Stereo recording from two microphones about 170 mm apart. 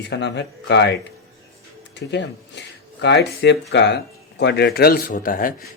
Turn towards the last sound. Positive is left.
turn(degrees=55)  # may be behind; listen again after turning